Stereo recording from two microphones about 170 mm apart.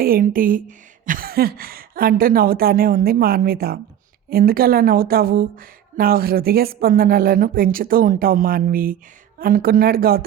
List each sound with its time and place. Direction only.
0.0 s a woman's voice: 55° right (ahead or behind)